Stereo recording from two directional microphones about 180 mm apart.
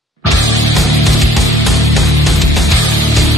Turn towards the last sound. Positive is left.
turn(degrees=0)  # may be behind; listen again after turning